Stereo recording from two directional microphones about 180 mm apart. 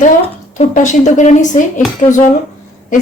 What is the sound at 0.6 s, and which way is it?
Speech, 45° left (ahead or behind).